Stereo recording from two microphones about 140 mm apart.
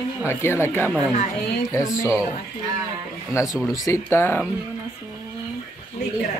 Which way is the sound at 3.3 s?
20° left (ahead or behind).